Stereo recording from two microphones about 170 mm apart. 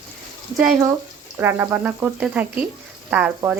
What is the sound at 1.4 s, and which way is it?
Stir, 15° right (ahead or behind).